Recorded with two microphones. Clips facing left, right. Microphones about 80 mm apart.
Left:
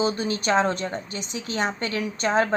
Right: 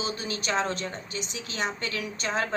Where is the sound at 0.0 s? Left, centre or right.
Left.